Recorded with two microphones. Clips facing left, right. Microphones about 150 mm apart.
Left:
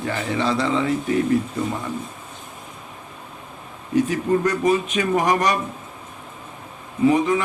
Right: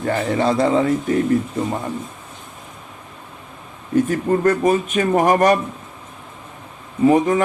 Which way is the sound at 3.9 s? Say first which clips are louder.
Right 2 dB; 50° right (ahead or behind).